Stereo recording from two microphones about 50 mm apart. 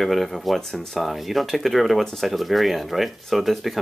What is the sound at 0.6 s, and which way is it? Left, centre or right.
Speech, centre.